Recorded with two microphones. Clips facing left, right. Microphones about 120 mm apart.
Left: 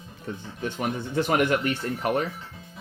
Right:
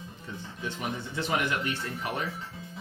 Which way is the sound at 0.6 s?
55° left (ahead or behind).